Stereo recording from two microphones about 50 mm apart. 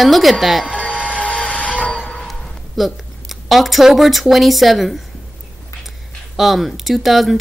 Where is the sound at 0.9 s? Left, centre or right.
Left.